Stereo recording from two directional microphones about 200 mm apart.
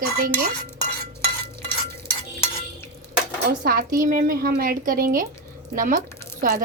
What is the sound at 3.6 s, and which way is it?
Speech, 45° right (ahead or behind).